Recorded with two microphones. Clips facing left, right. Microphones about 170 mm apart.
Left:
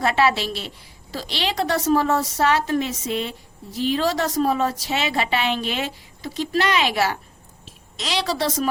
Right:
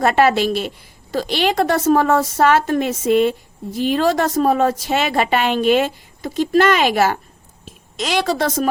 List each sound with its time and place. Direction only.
0.0 s a woman's voice: 50° right (ahead or behind)